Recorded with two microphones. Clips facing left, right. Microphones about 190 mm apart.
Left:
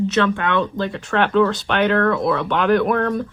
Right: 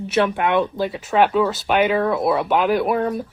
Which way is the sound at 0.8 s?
5° right (ahead or behind).